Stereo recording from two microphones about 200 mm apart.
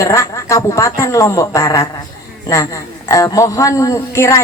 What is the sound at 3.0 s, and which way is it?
A woman's voice, 15° left (ahead or behind).